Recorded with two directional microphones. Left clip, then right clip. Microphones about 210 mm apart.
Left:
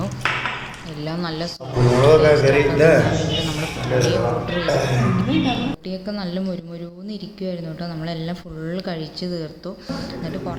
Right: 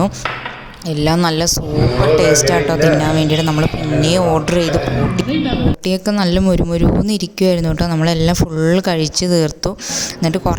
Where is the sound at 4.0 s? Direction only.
55° right (ahead or behind).